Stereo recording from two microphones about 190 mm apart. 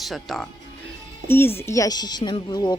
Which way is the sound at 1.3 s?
10° left (ahead or behind).